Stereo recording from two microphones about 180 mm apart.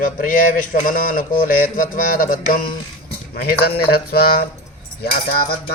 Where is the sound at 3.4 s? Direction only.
60° left (ahead or behind).